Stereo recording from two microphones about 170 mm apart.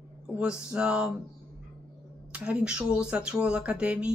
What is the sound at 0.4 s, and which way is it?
Speech, 5° right (ahead or behind).